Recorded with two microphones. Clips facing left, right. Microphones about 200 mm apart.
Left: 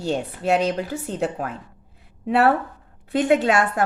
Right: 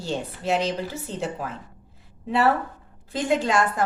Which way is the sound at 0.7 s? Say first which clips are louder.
Left 4 dB; 65° left (ahead or behind).